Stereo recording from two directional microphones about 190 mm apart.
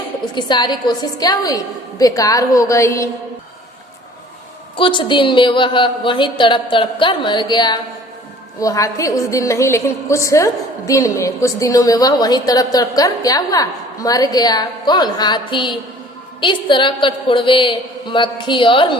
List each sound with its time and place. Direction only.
0.3 s a woman's voice: 25° left (ahead or behind)
4.8 s a woman's voice: 25° left (ahead or behind)